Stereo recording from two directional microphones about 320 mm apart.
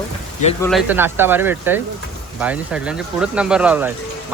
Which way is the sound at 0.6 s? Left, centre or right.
Centre.